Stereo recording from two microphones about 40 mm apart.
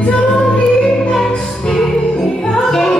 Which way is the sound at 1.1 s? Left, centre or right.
Centre.